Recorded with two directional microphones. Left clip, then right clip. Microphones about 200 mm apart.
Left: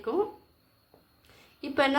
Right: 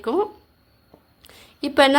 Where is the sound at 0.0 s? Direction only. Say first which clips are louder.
Right 7 dB; 55° right (ahead or behind).